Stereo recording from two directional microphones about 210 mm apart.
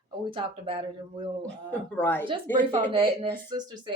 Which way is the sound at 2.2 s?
25° right (ahead or behind).